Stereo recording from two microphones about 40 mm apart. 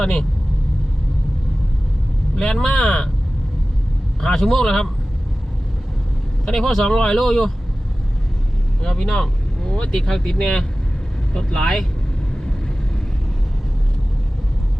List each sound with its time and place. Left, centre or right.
0.0 s speech: centre
2.3 s speech: centre
4.4 s speech: centre
6.4 s speech: centre
8.8 s speech: centre